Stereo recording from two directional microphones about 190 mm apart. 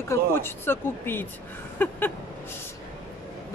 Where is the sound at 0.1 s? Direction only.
10° left (ahead or behind).